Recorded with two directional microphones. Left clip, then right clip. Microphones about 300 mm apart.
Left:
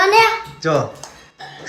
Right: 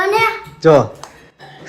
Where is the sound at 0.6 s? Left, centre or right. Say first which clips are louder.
Right 10 dB; centre.